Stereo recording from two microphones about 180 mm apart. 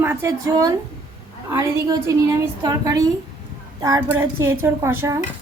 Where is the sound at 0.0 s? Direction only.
15° right (ahead or behind).